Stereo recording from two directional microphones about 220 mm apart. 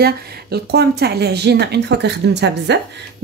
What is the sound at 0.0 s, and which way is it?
Speech, 45° right (ahead or behind).